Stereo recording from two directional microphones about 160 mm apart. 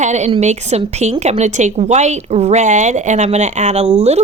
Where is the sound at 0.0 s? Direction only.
45° right (ahead or behind).